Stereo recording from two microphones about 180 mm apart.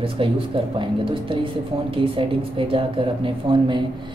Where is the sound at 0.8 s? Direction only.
30° right (ahead or behind).